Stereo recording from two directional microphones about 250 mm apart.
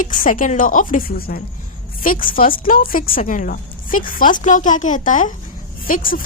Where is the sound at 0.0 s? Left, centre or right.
Left.